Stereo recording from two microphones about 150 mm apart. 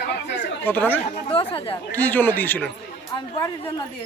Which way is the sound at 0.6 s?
15° left (ahead or behind).